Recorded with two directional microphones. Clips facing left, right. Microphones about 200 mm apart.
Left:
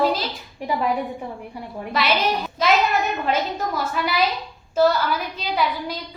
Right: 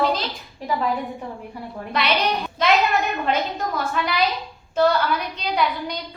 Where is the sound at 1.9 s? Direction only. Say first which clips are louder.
Left 1 dB; 5° left (ahead or behind).